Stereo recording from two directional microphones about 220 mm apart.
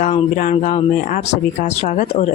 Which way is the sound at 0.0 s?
30° left (ahead or behind).